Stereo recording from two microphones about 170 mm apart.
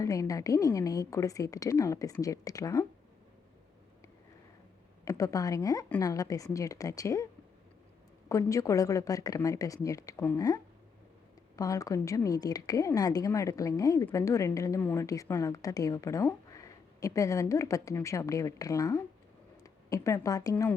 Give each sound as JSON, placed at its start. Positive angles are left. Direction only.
{"t": 0.0, "sound": "a woman's voice", "side_deg": 20}
{"t": 5.0, "sound": "a woman's voice", "side_deg": 20}
{"t": 8.3, "sound": "a woman's voice", "side_deg": 20}